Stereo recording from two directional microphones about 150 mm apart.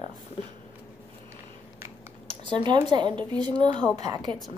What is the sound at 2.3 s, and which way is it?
A woman's voice, 30° right (ahead or behind).